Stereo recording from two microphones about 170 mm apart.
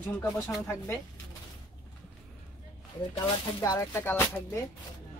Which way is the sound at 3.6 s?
20° left (ahead or behind).